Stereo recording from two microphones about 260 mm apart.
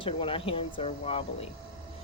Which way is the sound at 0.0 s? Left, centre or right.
Left.